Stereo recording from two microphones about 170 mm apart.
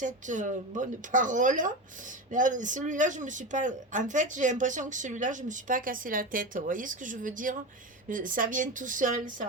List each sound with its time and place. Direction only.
0.0 s speech: 50° right (ahead or behind)